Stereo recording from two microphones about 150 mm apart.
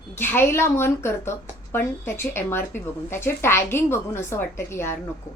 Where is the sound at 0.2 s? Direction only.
15° left (ahead or behind).